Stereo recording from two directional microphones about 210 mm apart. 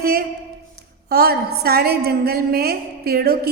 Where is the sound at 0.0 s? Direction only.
45° right (ahead or behind).